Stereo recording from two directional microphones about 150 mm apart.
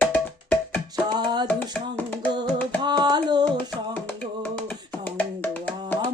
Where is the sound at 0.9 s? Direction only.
30° right (ahead or behind).